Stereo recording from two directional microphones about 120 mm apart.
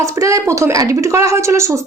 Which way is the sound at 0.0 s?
25° right (ahead or behind).